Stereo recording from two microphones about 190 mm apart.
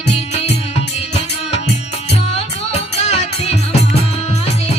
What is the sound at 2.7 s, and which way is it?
Music, 35° left (ahead or behind).